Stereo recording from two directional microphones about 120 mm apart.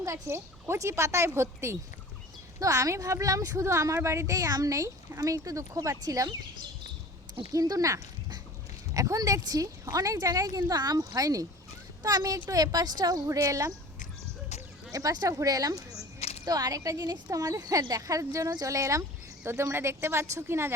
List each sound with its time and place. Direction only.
0.0 s a woman's voice: 25° right (ahead or behind)
14.9 s a woman's voice: 30° right (ahead or behind)